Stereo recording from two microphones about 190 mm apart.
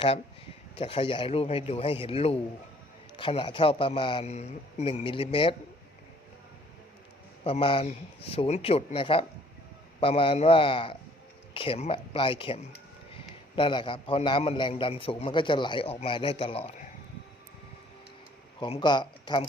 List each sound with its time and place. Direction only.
0.8 s a man's voice: 30° left (ahead or behind)
7.4 s a man's voice: 30° left (ahead or behind)
13.6 s a man's voice: 25° left (ahead or behind)
18.6 s a man's voice: 25° left (ahead or behind)